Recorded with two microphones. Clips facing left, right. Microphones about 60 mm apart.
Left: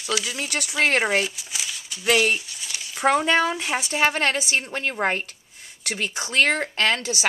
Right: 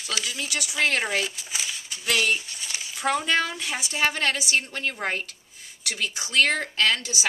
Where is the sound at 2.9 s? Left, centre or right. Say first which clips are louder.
Left 5 dB; left.